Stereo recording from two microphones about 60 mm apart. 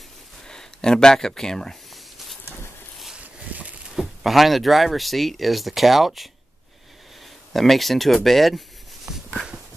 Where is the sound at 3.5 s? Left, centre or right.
Right.